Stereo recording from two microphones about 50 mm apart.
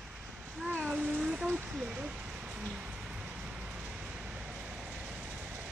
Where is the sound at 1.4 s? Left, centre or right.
Right.